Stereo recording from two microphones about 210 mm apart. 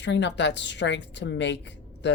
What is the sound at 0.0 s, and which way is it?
A woman's voice, 55° left (ahead or behind).